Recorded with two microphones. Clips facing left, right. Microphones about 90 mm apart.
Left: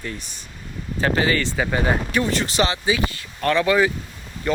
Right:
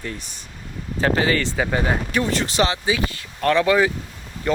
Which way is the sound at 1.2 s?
90° right.